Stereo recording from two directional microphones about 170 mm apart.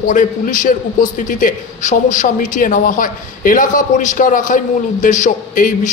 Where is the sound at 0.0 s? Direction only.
50° left (ahead or behind).